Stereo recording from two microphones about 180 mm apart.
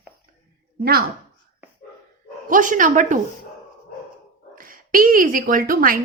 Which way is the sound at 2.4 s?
45° right (ahead or behind).